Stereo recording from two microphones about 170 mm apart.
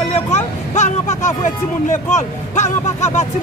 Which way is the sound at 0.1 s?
40° left (ahead or behind).